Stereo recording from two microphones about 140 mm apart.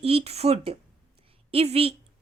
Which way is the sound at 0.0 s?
45° right (ahead or behind).